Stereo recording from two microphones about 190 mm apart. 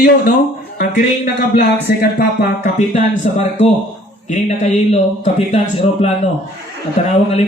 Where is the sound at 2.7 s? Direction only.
35° left (ahead or behind).